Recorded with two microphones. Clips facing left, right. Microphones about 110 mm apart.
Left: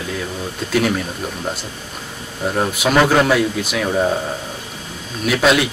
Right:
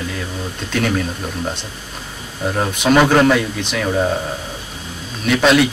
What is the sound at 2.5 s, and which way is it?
Speech, 5° left (ahead or behind).